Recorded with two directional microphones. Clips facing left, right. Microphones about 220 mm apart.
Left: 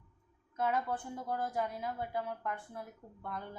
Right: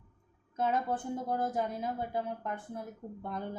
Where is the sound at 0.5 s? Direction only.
20° right (ahead or behind).